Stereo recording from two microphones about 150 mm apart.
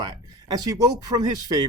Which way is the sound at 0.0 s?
25° right (ahead or behind).